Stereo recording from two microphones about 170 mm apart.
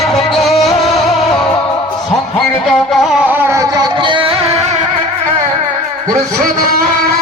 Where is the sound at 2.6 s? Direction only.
Centre (ahead or behind); by 4.3 s 30° right (ahead or behind).